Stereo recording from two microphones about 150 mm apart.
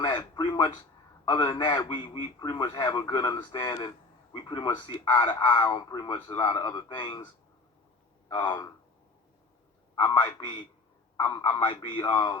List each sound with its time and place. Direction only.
0.0 s a man's voice: 30° left (ahead or behind)
8.3 s a man's voice: 30° left (ahead or behind)
9.9 s a man's voice: 30° left (ahead or behind)